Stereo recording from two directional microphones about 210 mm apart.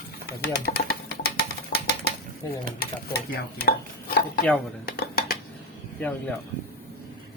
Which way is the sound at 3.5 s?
45° left (ahead or behind).